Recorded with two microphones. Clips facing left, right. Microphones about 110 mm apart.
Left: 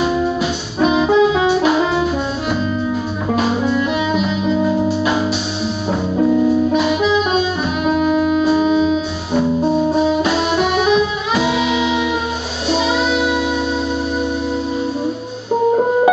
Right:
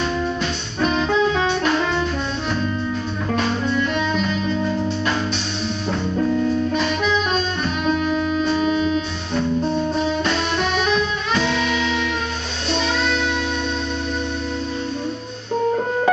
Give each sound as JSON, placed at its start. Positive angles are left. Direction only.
{"t": 0.4, "sound": "brass instrument", "side_deg": 10}
{"t": 3.3, "sound": "music", "side_deg": 5}
{"t": 6.7, "sound": "music", "side_deg": 5}
{"t": 15.7, "sound": "music", "side_deg": 15}